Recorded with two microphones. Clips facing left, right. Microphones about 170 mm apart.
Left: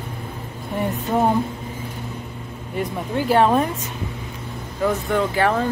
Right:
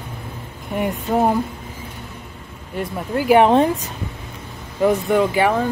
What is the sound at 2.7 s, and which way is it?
Speech, centre (ahead or behind).